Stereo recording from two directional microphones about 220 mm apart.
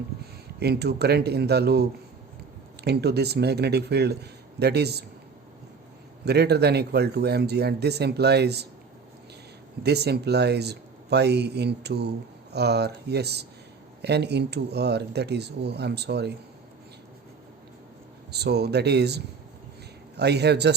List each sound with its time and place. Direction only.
0.6 s speech: 45° right (ahead or behind)
6.2 s speech: 50° right (ahead or behind)
9.8 s speech: 50° right (ahead or behind)
18.3 s speech: 50° right (ahead or behind)